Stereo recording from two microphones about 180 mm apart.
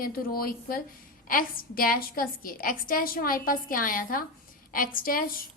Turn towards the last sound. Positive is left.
turn(degrees=50)  # may be behind; listen again after turning